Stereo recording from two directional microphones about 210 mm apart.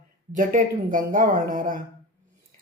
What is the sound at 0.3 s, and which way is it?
Speech, 40° right (ahead or behind).